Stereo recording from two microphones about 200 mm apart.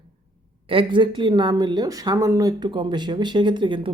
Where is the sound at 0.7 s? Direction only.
25° right (ahead or behind).